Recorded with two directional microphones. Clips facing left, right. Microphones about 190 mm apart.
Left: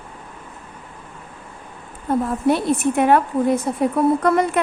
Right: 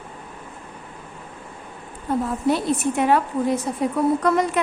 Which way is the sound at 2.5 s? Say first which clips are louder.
Left 3 dB; 55° left (ahead or behind).